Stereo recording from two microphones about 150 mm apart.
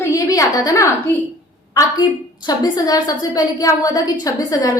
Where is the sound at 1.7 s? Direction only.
25° left (ahead or behind).